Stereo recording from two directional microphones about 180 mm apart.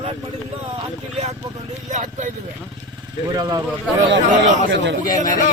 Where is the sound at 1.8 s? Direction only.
45° right (ahead or behind).